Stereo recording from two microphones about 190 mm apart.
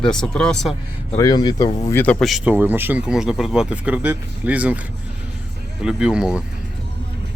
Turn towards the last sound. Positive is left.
turn(degrees=-5)  # may be behind; listen again after turning